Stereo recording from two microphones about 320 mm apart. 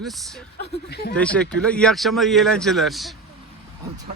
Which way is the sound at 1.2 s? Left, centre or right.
Centre.